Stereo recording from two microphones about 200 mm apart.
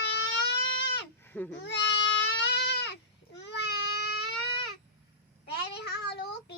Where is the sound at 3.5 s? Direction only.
55° left (ahead or behind).